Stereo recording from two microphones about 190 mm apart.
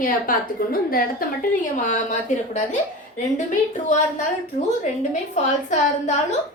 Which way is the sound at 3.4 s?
40° left (ahead or behind).